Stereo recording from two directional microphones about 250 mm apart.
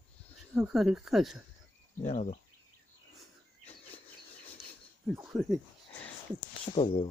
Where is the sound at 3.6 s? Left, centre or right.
Left.